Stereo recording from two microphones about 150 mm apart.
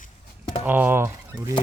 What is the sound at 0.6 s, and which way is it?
Speech, 10° right (ahead or behind).